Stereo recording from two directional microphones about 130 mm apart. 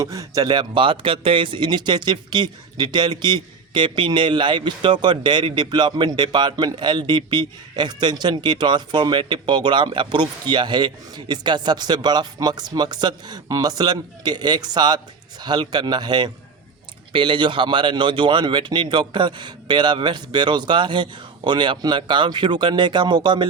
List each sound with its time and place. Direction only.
0.0 s speech: 25° right (ahead or behind)